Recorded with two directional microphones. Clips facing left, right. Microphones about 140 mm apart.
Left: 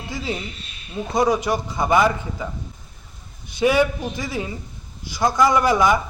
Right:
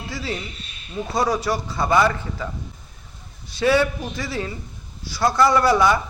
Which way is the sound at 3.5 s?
15° left (ahead or behind).